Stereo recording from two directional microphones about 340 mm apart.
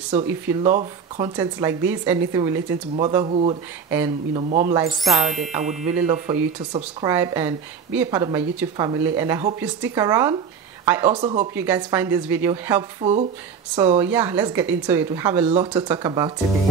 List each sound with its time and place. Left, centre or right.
0.5 s speech: centre
5.2 s music: right
6.1 s speech: centre